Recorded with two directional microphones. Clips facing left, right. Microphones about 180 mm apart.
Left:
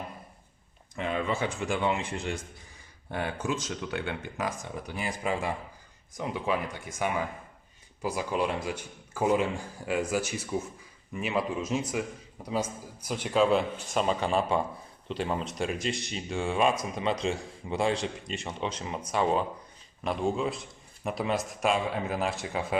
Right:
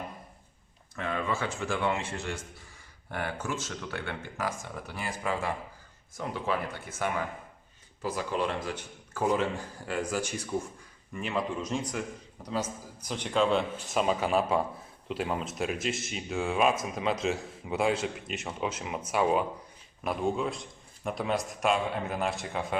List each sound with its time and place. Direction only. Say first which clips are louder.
0.9 s a man's voice: left 2 dB; 20° left (ahead or behind); by 22.8 s centre (ahead or behind)